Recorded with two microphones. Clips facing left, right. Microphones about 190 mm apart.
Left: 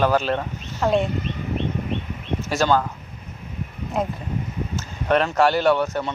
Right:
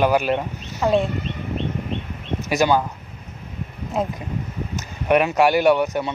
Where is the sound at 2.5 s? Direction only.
10° right (ahead or behind).